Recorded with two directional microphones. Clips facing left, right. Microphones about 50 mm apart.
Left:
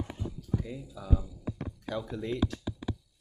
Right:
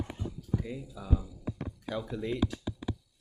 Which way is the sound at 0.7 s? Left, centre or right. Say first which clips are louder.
Even; centre.